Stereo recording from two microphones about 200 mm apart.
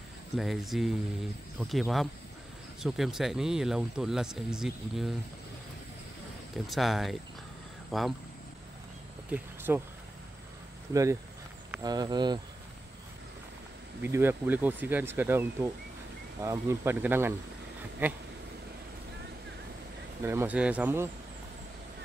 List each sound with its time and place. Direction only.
0.4 s speech: centre (ahead or behind)
6.5 s speech: centre (ahead or behind)
9.3 s speech: 10° right (ahead or behind)
10.9 s speech: 15° right (ahead or behind)
14.0 s speech: 10° right (ahead or behind)
20.2 s speech: 10° right (ahead or behind)